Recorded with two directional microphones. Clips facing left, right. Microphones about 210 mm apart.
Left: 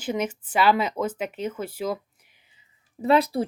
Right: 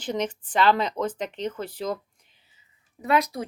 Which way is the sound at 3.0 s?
30° left (ahead or behind).